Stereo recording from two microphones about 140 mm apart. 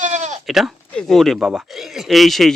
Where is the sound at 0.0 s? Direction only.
60° right (ahead or behind).